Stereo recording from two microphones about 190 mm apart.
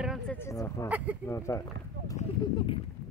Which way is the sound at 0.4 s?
15° left (ahead or behind).